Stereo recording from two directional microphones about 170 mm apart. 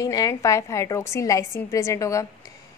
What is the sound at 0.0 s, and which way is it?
A woman's voice, 20° left (ahead or behind).